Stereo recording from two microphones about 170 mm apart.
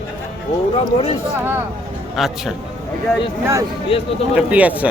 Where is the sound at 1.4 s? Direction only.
10° right (ahead or behind).